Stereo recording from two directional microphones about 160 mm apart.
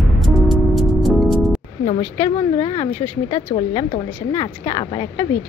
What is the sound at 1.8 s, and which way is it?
Speech, 40° left (ahead or behind).